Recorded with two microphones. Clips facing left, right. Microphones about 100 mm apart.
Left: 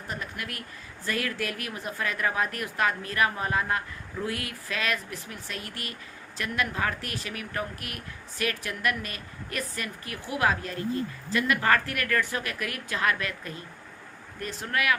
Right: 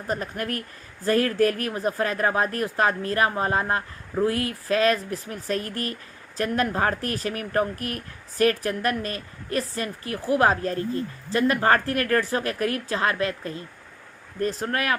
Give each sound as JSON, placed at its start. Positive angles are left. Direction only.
{"t": 0.1, "sound": "speech", "side_deg": -40}